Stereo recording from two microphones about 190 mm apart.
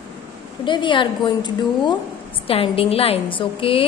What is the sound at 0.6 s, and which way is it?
A woman's voice, 25° left (ahead or behind).